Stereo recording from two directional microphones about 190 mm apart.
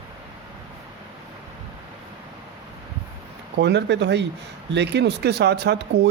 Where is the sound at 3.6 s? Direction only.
65° right (ahead or behind).